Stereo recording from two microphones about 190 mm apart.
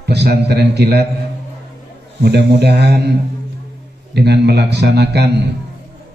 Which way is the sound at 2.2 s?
60° right (ahead or behind).